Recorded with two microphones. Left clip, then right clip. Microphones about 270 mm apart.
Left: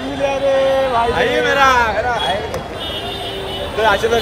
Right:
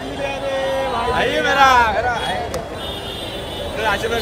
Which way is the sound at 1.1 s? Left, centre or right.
Centre.